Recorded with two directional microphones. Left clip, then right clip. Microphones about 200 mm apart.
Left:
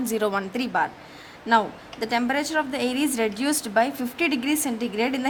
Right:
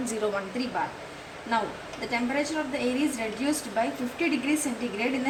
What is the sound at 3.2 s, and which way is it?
A woman's voice, 55° left (ahead or behind).